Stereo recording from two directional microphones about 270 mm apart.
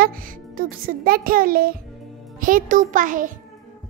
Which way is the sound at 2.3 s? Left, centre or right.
Right.